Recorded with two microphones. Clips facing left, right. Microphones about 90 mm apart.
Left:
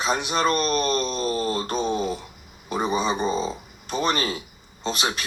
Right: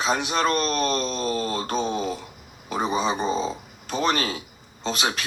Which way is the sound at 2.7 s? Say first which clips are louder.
Even; 25° right (ahead or behind).